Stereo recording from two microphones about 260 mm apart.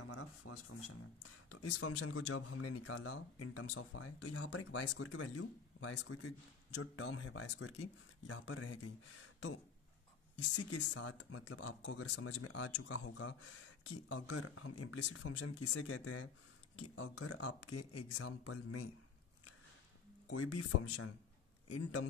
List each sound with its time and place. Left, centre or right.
0.0 s speech: left
20.2 s speech: left